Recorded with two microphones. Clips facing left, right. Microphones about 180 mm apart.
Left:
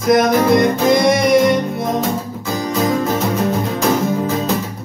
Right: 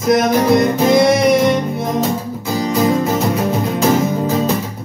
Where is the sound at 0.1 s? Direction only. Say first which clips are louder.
Even; centre (ahead or behind).